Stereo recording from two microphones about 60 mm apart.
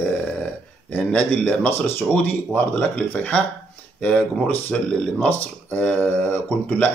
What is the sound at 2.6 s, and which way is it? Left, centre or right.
Speech, left.